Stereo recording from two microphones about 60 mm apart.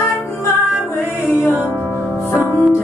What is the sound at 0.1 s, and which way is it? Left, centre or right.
Music, left.